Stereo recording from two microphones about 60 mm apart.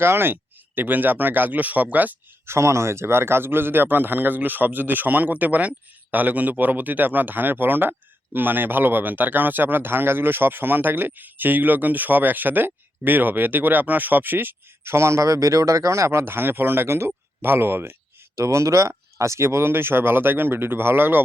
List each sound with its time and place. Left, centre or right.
0.0 s a man's voice: right
2.5 s a man's voice: right
16.2 s a man's voice: right
18.3 s a man's voice: right